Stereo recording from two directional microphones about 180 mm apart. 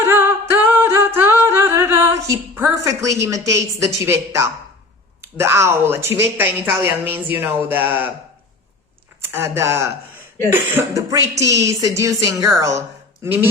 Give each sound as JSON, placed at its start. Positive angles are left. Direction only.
{"t": 0.0, "sound": "singing", "side_deg": -15}
{"t": 5.2, "sound": "speech", "side_deg": -15}
{"t": 9.2, "sound": "a woman's voice", "side_deg": -15}